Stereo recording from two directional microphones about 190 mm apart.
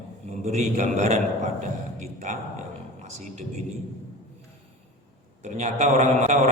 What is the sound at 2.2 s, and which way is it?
Speech, 40° right (ahead or behind).